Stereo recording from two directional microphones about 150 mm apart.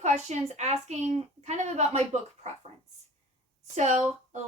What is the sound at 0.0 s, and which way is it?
A woman's voice, 50° right (ahead or behind).